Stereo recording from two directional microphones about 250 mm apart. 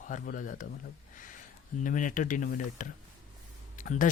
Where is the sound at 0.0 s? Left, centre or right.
Left.